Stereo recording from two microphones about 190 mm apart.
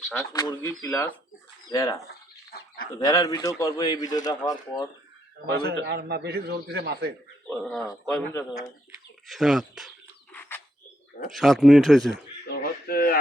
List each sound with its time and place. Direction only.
0.1 s speech: 15° left (ahead or behind)
3.0 s speech: 20° left (ahead or behind)
5.5 s a man's voice: 60° right (ahead or behind)
7.4 s speech: 5° left (ahead or behind)
9.2 s speech: centre (ahead or behind)
11.3 s speech: centre (ahead or behind)
12.1 s a sound: 55° left (ahead or behind)